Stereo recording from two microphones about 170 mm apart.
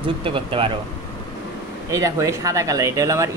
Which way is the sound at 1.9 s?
20° right (ahead or behind).